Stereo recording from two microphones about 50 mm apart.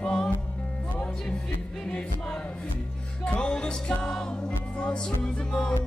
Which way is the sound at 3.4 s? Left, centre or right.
Centre.